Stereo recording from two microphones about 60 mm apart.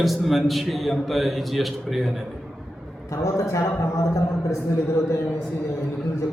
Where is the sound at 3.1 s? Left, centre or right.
Left.